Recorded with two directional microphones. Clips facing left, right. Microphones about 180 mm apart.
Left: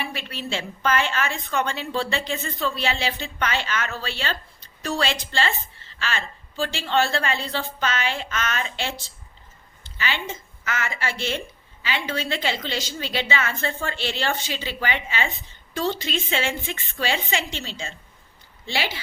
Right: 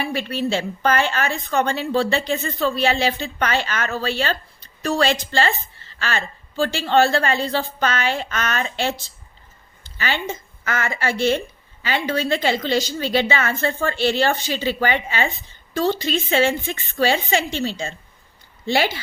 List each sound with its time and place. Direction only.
0.0 s a woman's voice: 40° right (ahead or behind)
10.0 s a woman's voice: 45° right (ahead or behind)